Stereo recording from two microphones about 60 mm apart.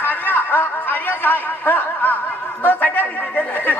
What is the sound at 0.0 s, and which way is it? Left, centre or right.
A man's voice, left.